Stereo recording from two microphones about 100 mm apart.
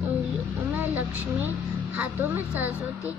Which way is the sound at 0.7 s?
15° right (ahead or behind).